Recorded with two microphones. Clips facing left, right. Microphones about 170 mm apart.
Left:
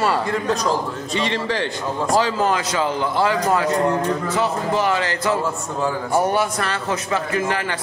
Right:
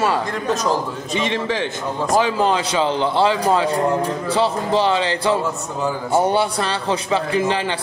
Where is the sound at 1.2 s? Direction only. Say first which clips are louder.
Right 1 dB; 15° right (ahead or behind).